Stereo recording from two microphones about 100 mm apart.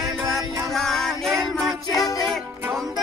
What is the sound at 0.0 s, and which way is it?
Music, centre (ahead or behind).